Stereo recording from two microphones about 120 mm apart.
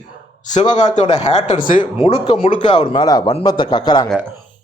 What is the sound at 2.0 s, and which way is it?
Speech, 55° left (ahead or behind).